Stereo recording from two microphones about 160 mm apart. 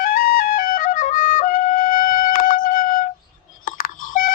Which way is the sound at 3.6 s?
60° left (ahead or behind).